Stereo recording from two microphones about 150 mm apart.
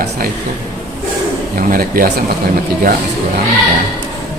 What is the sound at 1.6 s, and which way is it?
Speech, 70° right (ahead or behind).